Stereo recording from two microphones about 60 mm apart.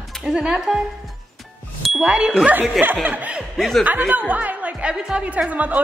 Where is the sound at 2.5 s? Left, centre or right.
Right.